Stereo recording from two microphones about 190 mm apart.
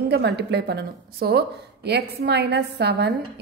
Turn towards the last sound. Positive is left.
turn(degrees=-60)  # may be behind; listen again after turning